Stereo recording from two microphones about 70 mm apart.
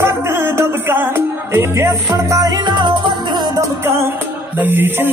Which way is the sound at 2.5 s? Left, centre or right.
Right.